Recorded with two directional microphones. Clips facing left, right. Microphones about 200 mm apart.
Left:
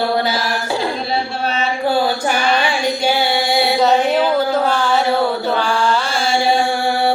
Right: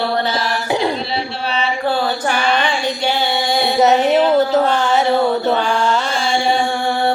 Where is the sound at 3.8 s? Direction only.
20° right (ahead or behind).